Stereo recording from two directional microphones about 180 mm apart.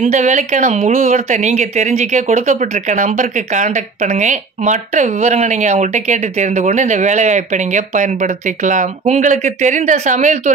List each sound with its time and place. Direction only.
0.0 s speech: 40° right (ahead or behind)